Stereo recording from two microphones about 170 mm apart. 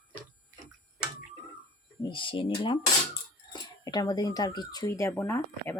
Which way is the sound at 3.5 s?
25° left (ahead or behind).